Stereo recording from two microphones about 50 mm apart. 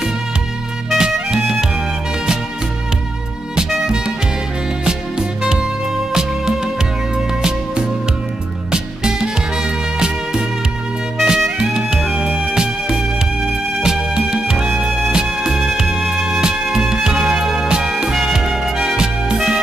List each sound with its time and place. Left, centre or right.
0.9 s music: centre
3.8 s music: centre
8.7 s music: centre